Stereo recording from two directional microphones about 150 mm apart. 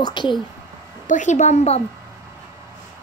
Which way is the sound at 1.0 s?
55° left (ahead or behind).